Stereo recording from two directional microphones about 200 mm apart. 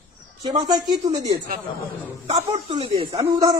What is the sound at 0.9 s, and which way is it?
Speech, 20° right (ahead or behind).